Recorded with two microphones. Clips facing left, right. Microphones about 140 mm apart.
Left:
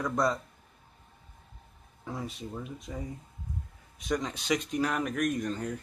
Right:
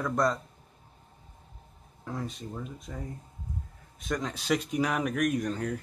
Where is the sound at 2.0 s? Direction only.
5° left (ahead or behind).